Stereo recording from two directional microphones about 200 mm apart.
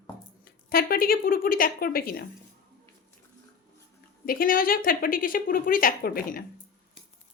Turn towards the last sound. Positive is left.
turn(degrees=45)  # may be behind; listen again after turning